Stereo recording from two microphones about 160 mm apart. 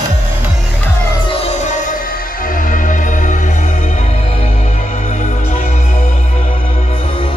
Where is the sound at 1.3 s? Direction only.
45° left (ahead or behind).